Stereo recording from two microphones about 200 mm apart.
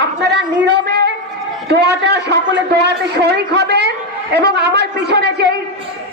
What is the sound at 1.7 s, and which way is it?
A man's voice, 55° right (ahead or behind).